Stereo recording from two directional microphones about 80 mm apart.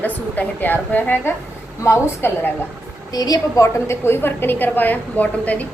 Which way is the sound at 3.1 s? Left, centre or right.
Left.